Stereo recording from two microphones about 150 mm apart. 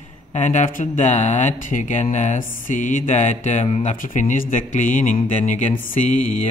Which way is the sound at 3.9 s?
60° left (ahead or behind).